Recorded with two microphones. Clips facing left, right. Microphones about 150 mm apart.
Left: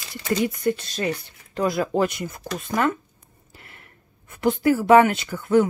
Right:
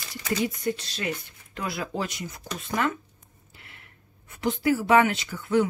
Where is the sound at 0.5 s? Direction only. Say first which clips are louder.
Left 5 dB; 55° left (ahead or behind).